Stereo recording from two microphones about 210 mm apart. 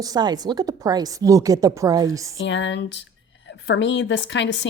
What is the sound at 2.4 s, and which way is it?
A woman's voice, 60° left (ahead or behind).